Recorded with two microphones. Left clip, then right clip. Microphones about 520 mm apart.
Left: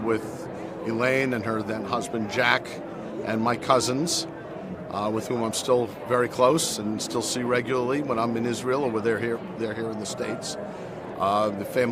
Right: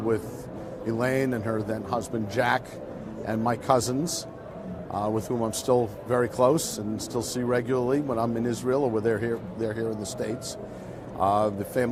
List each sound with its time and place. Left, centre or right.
0.9 s speech: right